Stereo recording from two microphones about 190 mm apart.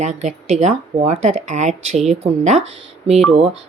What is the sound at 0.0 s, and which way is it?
Speech, 35° right (ahead or behind).